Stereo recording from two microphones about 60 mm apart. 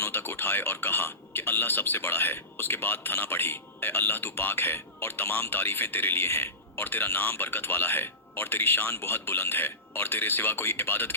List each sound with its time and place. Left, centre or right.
0.0 s a man's voice: left